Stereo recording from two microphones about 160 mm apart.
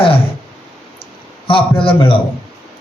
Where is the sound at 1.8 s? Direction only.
35° left (ahead or behind).